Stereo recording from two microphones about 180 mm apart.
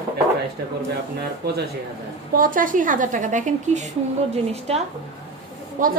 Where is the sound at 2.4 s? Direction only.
50° right (ahead or behind).